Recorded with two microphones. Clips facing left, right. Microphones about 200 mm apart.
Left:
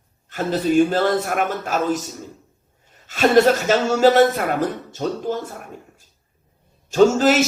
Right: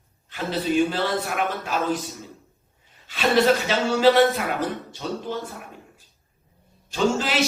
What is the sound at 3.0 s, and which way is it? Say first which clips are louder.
A man's voice: left 5 dB; 45° left (ahead or behind).